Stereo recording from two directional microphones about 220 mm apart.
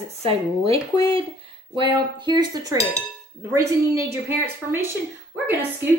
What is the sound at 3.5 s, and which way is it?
A woman's voice, 15° right (ahead or behind).